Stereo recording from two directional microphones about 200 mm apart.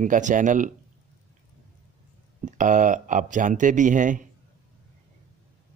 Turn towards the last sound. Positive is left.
turn(degrees=-40)  # may be behind; listen again after turning